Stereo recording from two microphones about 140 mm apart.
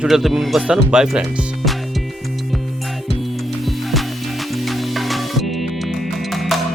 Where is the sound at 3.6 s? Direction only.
Centre (ahead or behind).